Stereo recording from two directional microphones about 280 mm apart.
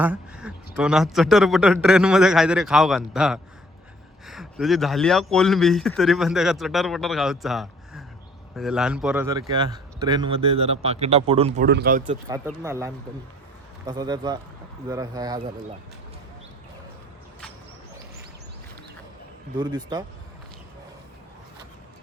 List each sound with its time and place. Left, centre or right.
0.0 s speech: centre; by 11.6 s right
11.6 s speech: right
12.3 s speech: centre
19.5 s speech: centre